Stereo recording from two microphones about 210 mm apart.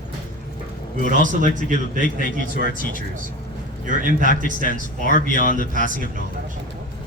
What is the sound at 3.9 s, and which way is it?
Speech, 40° right (ahead or behind).